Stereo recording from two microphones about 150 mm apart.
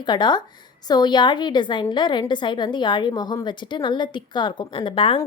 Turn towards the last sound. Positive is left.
turn(degrees=35)  # may be behind; listen again after turning